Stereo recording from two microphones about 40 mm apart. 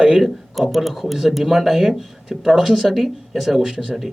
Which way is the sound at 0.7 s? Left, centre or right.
Centre.